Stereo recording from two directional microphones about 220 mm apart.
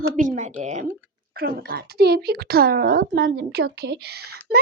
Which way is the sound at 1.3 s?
45° right (ahead or behind).